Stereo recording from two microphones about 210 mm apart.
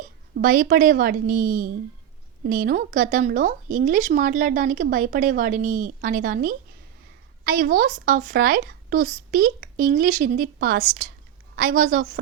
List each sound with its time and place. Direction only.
0.3 s speech: 40° right (ahead or behind)